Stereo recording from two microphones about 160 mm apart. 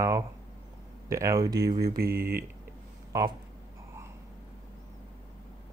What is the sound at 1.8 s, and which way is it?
Speech, 70° right (ahead or behind).